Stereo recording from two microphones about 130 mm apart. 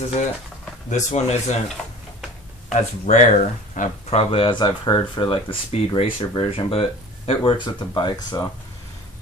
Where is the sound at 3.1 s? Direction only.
70° left (ahead or behind).